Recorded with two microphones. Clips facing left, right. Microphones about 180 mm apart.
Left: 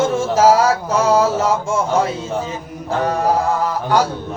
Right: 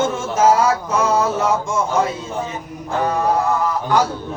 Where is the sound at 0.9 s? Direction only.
30° left (ahead or behind).